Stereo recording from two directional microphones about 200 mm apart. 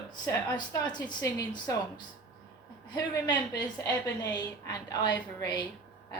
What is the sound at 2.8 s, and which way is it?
A woman's voice, 20° left (ahead or behind).